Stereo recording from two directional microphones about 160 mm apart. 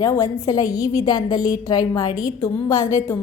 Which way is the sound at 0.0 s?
20° left (ahead or behind).